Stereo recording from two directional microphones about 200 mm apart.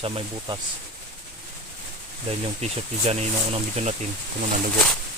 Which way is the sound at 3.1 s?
30° right (ahead or behind).